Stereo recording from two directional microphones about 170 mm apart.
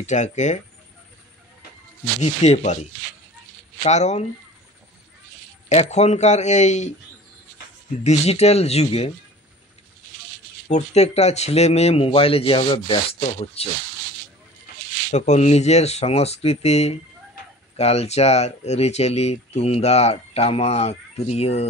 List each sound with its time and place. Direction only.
0.0 s speech: 45° left (ahead or behind)
2.2 s speech: 40° left (ahead or behind)
5.7 s speech: 40° left (ahead or behind)
8.0 s speech: 40° left (ahead or behind)
10.7 s speech: 40° left (ahead or behind)
15.0 s speech: 40° left (ahead or behind)